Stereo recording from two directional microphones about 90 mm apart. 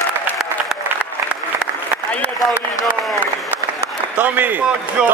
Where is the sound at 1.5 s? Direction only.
20° right (ahead or behind).